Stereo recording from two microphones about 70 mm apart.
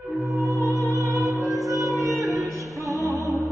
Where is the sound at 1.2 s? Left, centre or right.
Centre.